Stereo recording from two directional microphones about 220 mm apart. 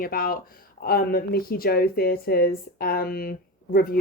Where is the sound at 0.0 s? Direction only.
40° left (ahead or behind).